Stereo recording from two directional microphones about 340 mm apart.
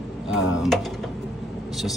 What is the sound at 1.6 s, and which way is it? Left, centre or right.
Vehicle, centre.